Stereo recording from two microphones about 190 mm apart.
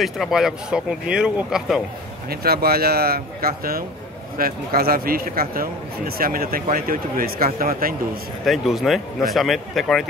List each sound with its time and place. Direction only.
0.0 s speech: centre (ahead or behind)
2.2 s a man's voice: 55° right (ahead or behind)
8.5 s speech: centre (ahead or behind)